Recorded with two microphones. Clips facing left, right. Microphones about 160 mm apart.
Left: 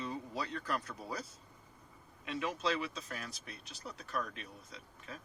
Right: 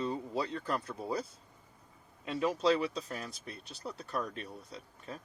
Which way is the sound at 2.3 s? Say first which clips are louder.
Right 7 dB; 35° right (ahead or behind).